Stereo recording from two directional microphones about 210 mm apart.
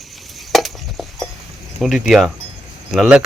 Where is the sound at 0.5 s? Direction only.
Centre (ahead or behind).